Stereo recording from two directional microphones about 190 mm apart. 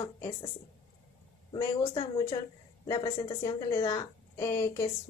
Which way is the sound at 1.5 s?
25° left (ahead or behind).